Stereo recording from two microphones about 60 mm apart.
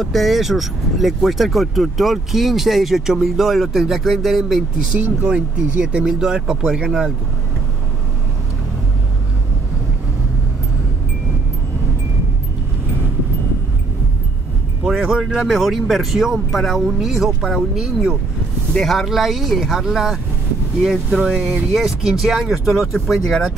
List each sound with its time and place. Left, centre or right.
0.0 s speech: centre
4.9 s speech: right
5.3 s speech: centre
6.0 s speech: centre
14.9 s speech: centre
20.8 s speech: centre
21.7 s speech: centre